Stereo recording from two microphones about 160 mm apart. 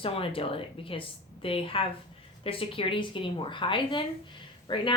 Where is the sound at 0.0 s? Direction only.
35° left (ahead or behind).